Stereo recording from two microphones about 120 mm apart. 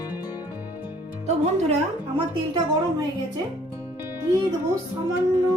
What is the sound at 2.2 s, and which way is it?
Speech, 35° right (ahead or behind).